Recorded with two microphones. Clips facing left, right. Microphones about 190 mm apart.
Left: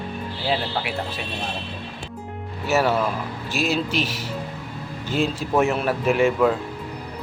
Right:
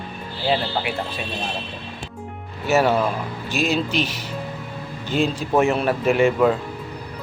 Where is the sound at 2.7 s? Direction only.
Centre (ahead or behind).